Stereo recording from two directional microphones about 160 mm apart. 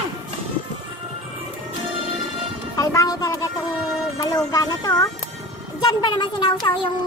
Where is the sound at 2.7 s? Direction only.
20° left (ahead or behind).